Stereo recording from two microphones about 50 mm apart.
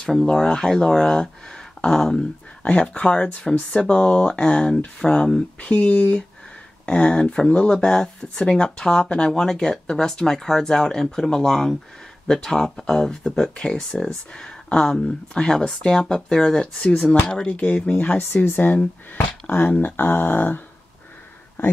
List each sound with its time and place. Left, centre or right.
0.1 s speech: centre
2.6 s speech: left
17.8 s speech: left